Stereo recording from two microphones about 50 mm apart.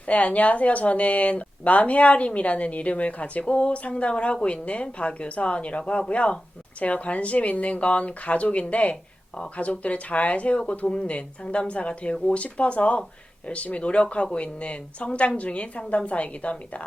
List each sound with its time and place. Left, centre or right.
0.1 s a woman's voice: left